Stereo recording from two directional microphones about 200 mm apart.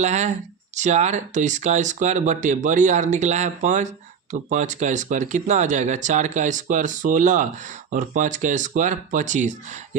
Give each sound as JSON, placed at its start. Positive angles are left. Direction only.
{"t": 0.0, "sound": "speech", "side_deg": -35}